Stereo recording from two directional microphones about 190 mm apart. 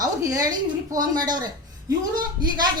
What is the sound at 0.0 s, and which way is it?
A woman's voice, 20° right (ahead or behind).